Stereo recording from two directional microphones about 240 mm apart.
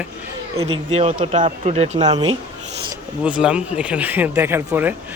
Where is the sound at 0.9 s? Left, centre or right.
Right.